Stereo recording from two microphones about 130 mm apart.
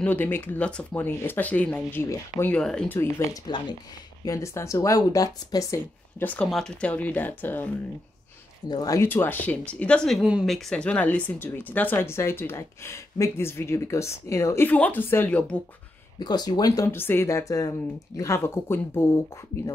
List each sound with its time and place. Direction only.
0.0 s speech: 15° left (ahead or behind)
2.4 s speech: 10° left (ahead or behind)
3.4 s speech: 35° left (ahead or behind)
4.2 s speech: 25° left (ahead or behind)
8.6 s speech: 30° left (ahead or behind); by 15.6 s 10° left (ahead or behind)
16.2 s speech: 30° left (ahead or behind)